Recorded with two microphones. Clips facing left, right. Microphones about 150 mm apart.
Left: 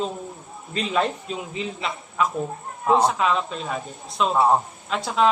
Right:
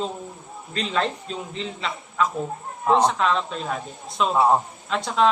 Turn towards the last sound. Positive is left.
turn(degrees=0)  # may be behind; listen again after turning